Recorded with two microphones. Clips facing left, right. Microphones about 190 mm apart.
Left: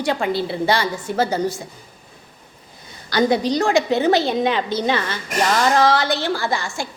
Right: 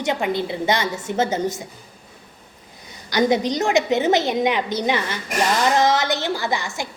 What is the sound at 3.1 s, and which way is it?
A woman's voice, 15° right (ahead or behind).